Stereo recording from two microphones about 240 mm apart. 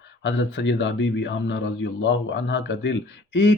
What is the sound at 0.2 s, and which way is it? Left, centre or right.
Speech, left.